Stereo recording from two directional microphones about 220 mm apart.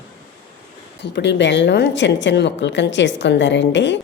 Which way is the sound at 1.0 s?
55° left (ahead or behind).